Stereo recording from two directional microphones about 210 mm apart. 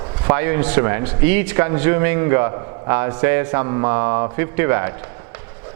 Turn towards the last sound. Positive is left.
turn(degrees=-15)  # may be behind; listen again after turning